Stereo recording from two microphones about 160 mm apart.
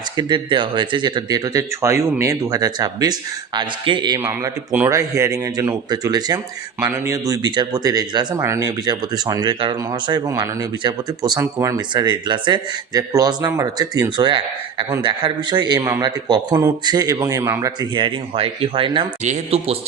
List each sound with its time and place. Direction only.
0.2 s speech: 30° right (ahead or behind)
4.3 s a man's voice: 15° right (ahead or behind); by 19.9 s 40° right (ahead or behind)